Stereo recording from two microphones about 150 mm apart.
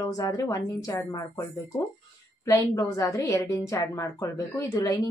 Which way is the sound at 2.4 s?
20° left (ahead or behind).